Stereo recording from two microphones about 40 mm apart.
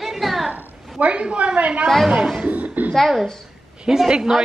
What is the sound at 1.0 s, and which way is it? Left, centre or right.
Speech, right.